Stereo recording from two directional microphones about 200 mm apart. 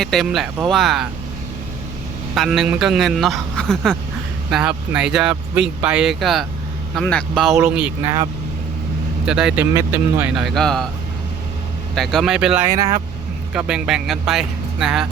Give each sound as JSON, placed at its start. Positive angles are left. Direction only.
{"t": 0.0, "sound": "speech", "side_deg": 0}
{"t": 2.3, "sound": "speech", "side_deg": 0}
{"t": 9.2, "sound": "speech", "side_deg": -5}
{"t": 11.9, "sound": "speech", "side_deg": 0}
{"t": 12.7, "sound": "speech", "side_deg": -15}
{"t": 13.5, "sound": "speech", "side_deg": -5}